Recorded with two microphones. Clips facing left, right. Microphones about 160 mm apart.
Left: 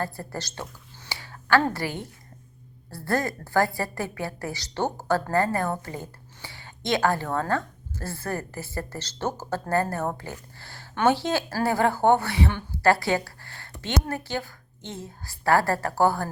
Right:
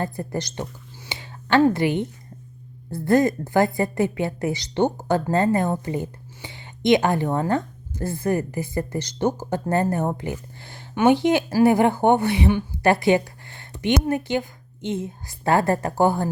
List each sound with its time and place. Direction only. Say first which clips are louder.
0.0 s a woman's voice: right 5 dB; 20° right (ahead or behind)